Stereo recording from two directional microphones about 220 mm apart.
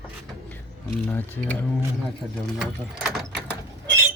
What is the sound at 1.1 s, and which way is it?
Speech, 10° left (ahead or behind).